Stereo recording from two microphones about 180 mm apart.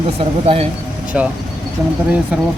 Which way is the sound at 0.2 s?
30° right (ahead or behind).